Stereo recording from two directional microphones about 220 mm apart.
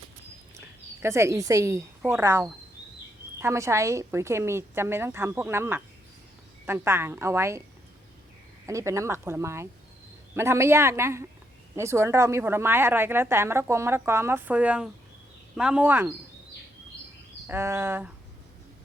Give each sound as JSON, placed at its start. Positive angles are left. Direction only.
{"t": 1.0, "sound": "a woman's voice", "side_deg": -10}
{"t": 8.6, "sound": "a woman's voice", "side_deg": -15}
{"t": 17.4, "sound": "a woman's voice", "side_deg": -10}